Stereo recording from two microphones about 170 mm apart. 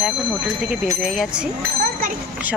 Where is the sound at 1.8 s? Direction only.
55° right (ahead or behind).